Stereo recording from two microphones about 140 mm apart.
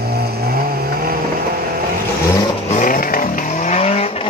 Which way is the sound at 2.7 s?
75° left (ahead or behind).